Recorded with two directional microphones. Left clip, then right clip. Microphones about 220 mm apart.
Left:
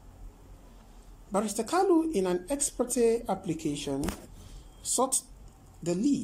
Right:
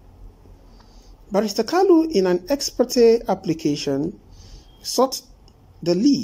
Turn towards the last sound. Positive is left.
turn(degrees=-15)  # may be behind; listen again after turning